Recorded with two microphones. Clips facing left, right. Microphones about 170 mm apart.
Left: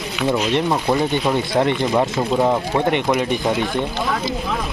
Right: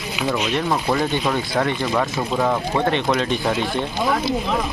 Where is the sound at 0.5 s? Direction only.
15° left (ahead or behind).